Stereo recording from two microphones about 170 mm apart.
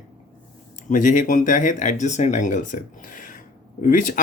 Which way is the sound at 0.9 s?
50° left (ahead or behind).